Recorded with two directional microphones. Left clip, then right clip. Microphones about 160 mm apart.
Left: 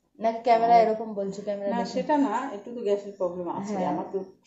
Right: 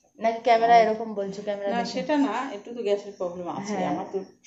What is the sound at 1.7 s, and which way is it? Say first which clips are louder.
Speech: left 1 dB; 25° left (ahead or behind).